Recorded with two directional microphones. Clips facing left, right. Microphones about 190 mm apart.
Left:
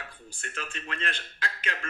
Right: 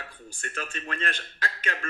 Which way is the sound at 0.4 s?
45° right (ahead or behind).